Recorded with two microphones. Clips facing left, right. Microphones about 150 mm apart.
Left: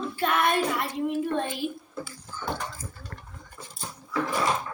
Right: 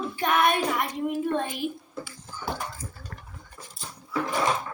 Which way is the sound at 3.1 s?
5° right (ahead or behind).